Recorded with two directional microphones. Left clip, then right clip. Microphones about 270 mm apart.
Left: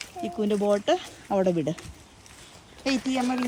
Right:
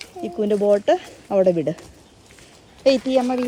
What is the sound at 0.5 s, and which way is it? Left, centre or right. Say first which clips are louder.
Speech: right 7 dB; left.